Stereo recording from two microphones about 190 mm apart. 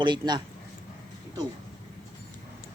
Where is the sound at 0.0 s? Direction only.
25° right (ahead or behind).